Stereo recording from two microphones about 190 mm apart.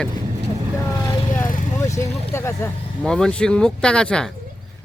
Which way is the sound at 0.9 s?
15° left (ahead or behind).